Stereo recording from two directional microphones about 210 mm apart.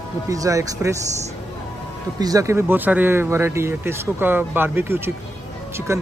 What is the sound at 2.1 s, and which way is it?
Speech, 15° right (ahead or behind).